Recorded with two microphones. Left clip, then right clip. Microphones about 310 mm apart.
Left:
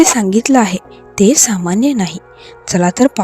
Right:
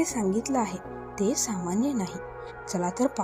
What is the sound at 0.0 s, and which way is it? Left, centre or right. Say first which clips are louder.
A woman's voice: left 16 dB; left.